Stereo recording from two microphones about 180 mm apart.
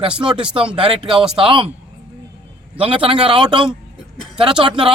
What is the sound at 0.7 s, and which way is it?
Speech, 25° right (ahead or behind).